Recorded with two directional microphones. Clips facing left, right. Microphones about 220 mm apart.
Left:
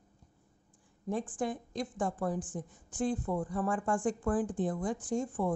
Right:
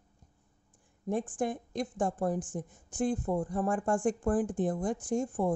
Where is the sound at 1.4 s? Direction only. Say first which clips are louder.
Right 2 dB; 50° right (ahead or behind).